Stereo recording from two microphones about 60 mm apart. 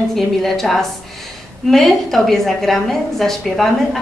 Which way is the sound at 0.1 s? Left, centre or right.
Centre.